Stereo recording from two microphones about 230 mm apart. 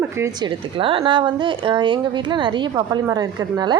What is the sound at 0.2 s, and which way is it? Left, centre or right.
A woman's voice, centre.